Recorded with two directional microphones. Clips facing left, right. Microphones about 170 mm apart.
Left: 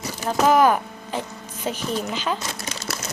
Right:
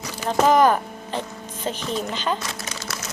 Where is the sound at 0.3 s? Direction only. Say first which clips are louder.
Even; 5° left (ahead or behind).